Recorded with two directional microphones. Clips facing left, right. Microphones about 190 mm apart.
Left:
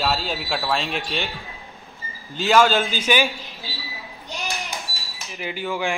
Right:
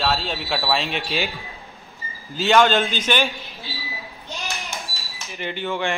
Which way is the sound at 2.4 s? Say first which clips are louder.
Right 1 dB; 5° left (ahead or behind).